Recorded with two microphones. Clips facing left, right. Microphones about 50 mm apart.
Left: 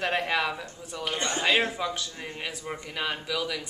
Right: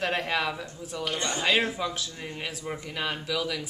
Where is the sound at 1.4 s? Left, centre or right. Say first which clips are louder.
Even; centre.